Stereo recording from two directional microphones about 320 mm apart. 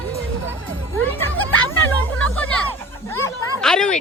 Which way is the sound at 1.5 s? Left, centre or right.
Left.